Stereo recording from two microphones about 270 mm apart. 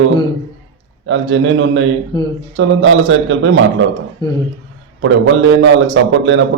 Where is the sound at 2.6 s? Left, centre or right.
Right.